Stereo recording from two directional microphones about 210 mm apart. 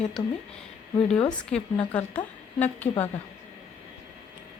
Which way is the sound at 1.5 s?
5° left (ahead or behind).